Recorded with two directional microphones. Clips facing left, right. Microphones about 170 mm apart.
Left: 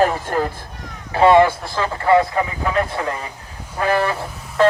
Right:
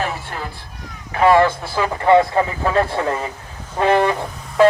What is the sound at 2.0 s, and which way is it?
Speech, 30° right (ahead or behind).